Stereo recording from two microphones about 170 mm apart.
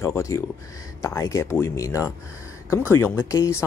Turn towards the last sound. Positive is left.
turn(degrees=20)  # may be behind; listen again after turning